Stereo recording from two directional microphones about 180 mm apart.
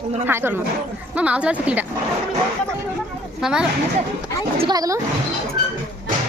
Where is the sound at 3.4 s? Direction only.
5° right (ahead or behind).